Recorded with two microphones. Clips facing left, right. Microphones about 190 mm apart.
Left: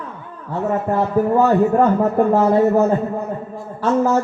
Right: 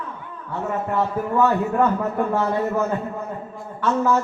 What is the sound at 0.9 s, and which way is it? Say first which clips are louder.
Music: left 5 dB; 35° left (ahead or behind).